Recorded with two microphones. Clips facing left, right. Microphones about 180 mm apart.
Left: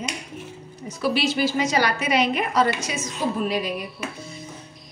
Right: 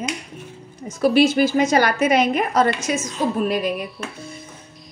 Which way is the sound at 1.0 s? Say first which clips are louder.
Right 7 dB; 50° right (ahead or behind).